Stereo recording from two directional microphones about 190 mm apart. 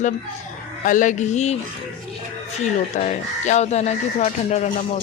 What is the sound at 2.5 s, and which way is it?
Speech, 35° left (ahead or behind).